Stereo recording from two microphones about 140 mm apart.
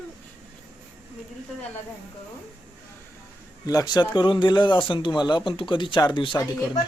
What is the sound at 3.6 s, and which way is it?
Speech, 25° left (ahead or behind).